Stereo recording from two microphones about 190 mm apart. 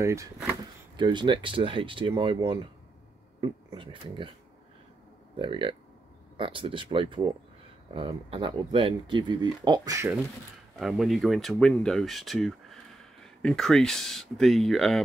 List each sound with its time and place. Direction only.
0.0 s speech: 15° right (ahead or behind)
5.4 s speech: 25° right (ahead or behind)
10.8 s speech: centre (ahead or behind)